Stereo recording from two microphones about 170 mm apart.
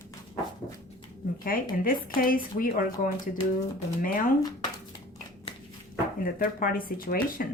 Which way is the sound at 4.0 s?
55° left (ahead or behind).